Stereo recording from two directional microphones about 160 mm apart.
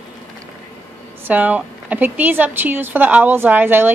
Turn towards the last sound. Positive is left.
turn(degrees=-10)  # may be behind; listen again after turning